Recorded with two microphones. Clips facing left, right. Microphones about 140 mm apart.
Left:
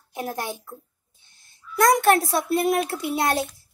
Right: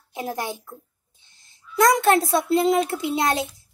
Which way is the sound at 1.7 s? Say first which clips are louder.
Even; 20° right (ahead or behind).